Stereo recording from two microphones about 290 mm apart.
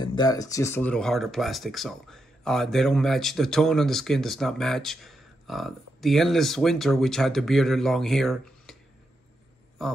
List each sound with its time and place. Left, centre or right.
0.0 s speech: centre
9.8 s speech: centre